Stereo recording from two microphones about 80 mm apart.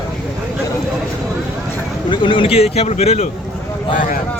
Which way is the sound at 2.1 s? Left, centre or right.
Left.